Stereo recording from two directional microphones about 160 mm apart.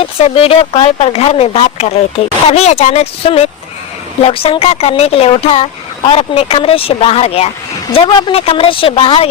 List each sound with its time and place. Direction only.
0.0 s a woman's voice: 40° left (ahead or behind)